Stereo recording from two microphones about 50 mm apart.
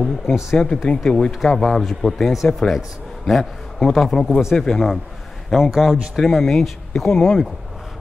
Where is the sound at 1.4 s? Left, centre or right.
Centre.